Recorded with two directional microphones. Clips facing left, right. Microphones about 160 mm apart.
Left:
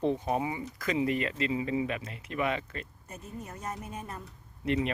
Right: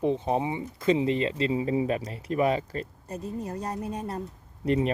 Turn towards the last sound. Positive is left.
turn(degrees=-35)  # may be behind; listen again after turning